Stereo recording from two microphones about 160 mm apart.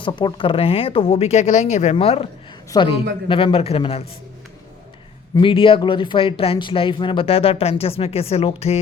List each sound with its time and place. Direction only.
0.0 s speech: 30° left (ahead or behind)
5.3 s speech: 30° left (ahead or behind)